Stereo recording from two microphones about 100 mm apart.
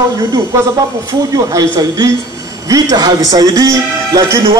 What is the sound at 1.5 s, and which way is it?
A man's voice, 35° right (ahead or behind).